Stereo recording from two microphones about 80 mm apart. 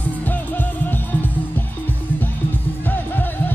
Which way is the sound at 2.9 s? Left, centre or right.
Left.